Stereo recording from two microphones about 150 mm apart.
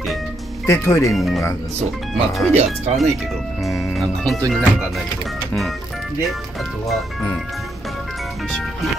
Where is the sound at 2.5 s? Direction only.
45° right (ahead or behind).